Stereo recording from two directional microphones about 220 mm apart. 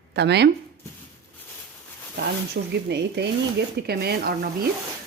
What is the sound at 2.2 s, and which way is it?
Speech, 50° right (ahead or behind).